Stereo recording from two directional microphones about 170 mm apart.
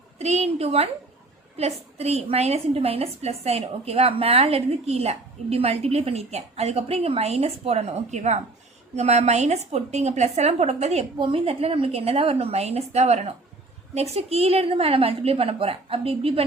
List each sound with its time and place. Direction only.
0.2 s a woman's voice: 40° right (ahead or behind)